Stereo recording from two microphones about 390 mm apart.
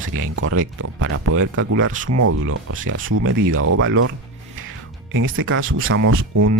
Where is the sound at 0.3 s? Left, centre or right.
Right.